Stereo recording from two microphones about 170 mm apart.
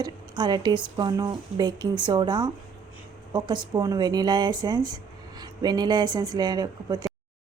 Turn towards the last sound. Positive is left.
turn(degrees=-20)  # may be behind; listen again after turning